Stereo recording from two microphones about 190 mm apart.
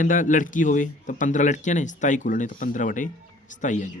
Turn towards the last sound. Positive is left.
turn(degrees=40)  # may be behind; listen again after turning